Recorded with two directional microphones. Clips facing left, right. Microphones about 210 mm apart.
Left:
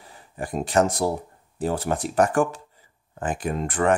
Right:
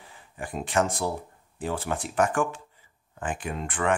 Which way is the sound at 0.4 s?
40° left (ahead or behind).